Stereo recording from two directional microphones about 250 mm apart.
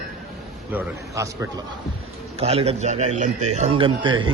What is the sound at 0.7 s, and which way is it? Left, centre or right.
Speech, centre.